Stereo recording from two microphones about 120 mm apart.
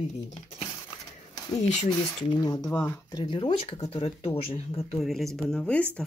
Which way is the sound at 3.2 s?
50° left (ahead or behind).